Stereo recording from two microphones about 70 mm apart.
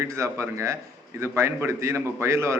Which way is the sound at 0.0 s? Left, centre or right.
Right.